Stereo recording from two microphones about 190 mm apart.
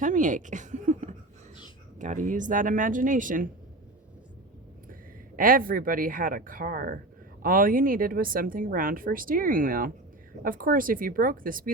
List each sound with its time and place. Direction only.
0.0 s a woman's voice: 40° right (ahead or behind)
5.4 s a woman's voice: 50° right (ahead or behind)